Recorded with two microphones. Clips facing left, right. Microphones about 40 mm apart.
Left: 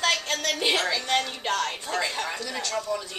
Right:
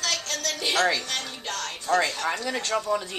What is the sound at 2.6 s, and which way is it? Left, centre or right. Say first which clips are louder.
Speech: right 3 dB; centre.